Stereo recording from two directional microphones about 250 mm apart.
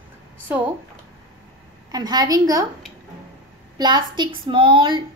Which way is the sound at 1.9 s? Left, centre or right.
Centre.